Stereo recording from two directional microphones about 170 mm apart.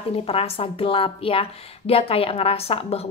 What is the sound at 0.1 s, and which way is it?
A woman's voice, 35° left (ahead or behind).